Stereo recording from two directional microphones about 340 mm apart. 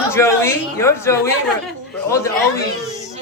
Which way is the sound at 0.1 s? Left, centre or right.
Centre.